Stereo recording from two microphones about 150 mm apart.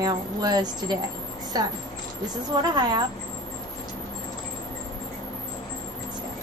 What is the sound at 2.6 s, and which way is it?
Speech, 30° right (ahead or behind).